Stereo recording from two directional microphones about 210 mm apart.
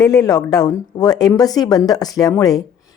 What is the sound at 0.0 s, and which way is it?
A woman's voice, 15° left (ahead or behind).